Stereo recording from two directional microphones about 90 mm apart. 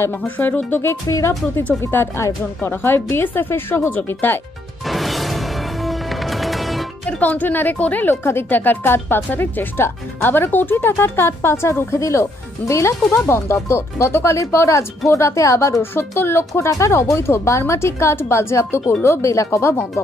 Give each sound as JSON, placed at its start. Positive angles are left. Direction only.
{"t": 0.0, "sound": "a woman's voice", "side_deg": 25}
{"t": 1.0, "sound": "speech", "side_deg": 35}
{"t": 1.8, "sound": "a woman's voice", "side_deg": 25}
{"t": 4.8, "sound": "music", "side_deg": 0}
{"t": 7.1, "sound": "a woman's voice", "side_deg": 20}